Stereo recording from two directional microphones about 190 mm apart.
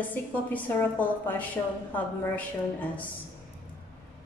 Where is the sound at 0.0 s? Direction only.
10° left (ahead or behind).